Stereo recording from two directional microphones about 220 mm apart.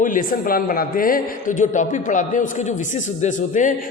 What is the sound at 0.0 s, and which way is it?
A man's voice, 40° left (ahead or behind).